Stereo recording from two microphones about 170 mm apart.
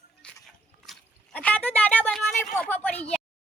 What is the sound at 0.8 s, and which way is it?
A woman's voice, 5° left (ahead or behind).